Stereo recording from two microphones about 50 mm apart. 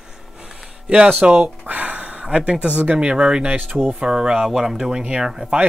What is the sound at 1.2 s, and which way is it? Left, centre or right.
Speech, right.